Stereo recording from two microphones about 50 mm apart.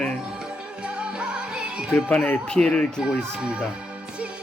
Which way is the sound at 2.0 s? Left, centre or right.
Left.